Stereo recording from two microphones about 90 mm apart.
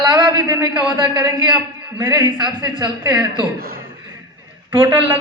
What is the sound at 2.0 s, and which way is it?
A man's voice, 50° right (ahead or behind).